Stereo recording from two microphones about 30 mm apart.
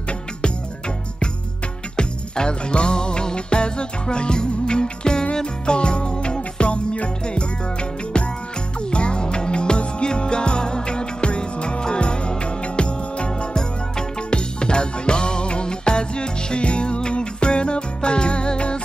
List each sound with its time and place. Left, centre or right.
2.0 s music: left
8.9 s music: left